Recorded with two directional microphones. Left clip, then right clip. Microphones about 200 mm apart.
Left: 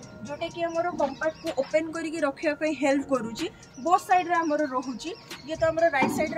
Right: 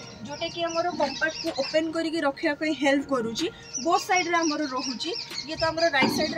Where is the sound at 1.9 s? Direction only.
15° left (ahead or behind).